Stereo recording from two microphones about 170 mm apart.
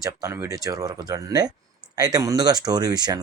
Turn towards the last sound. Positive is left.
turn(degrees=-25)  # may be behind; listen again after turning